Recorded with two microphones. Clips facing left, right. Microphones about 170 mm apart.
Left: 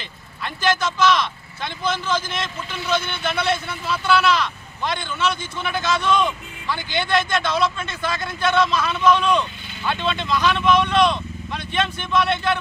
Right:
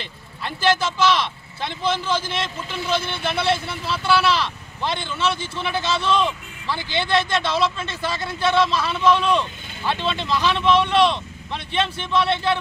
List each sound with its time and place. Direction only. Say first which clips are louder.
0.4 s speech: right 1 dB; 30° right (ahead or behind)